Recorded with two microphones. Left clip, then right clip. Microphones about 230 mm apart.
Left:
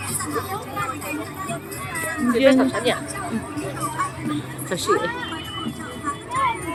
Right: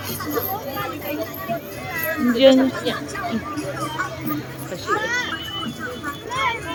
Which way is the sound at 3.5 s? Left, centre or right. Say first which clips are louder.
Right 1 dB; left.